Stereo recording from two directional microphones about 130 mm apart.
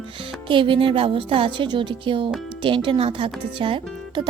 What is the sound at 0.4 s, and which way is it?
Speech, 40° right (ahead or behind).